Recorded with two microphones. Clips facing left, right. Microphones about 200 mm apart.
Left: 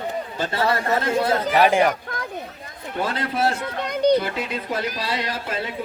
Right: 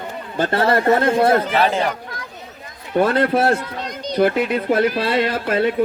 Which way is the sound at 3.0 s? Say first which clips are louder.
Right 7 dB; 60° right (ahead or behind).